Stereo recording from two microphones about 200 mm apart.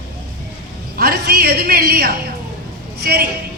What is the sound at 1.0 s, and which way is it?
A woman's voice, 50° right (ahead or behind).